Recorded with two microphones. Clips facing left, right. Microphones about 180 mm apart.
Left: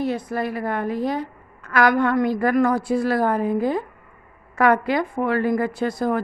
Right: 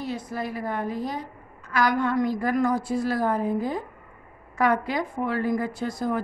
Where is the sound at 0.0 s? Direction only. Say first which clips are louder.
Left 6 dB; 60° left (ahead or behind).